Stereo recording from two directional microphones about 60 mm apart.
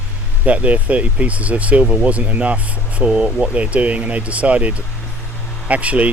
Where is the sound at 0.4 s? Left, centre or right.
Right.